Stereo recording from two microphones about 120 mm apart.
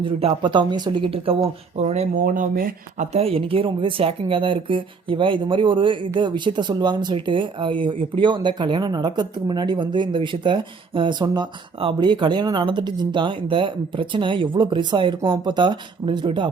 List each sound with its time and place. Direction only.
0.0 s speech: 55° right (ahead or behind)
0.4 s speech: 40° right (ahead or behind); by 2.5 s 90° right
3.0 s speech: 60° right (ahead or behind); by 16.5 s 40° right (ahead or behind)